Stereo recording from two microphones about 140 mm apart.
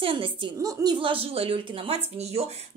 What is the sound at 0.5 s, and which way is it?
A woman's voice, 30° right (ahead or behind).